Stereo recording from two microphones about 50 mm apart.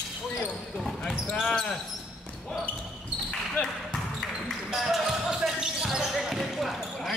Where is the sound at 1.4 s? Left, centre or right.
Centre.